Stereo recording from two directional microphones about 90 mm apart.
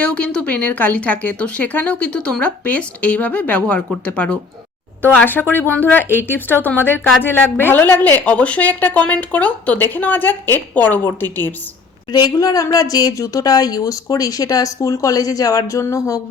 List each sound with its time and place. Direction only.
0.0 s speech: 10° left (ahead or behind)
12.1 s a man's voice: 45° left (ahead or behind)